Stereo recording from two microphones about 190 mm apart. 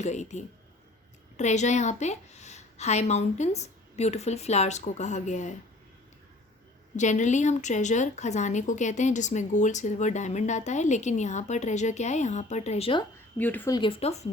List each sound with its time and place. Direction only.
0.0 s a woman's voice: 35° left (ahead or behind)
6.9 s a woman's voice: 40° left (ahead or behind)
13.4 s speech: 10° left (ahead or behind)
13.7 s a woman's voice: 30° left (ahead or behind)